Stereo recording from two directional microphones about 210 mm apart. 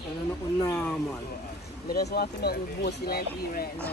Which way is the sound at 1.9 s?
50° left (ahead or behind).